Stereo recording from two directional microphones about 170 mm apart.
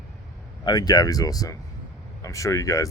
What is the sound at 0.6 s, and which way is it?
Speech, 25° left (ahead or behind).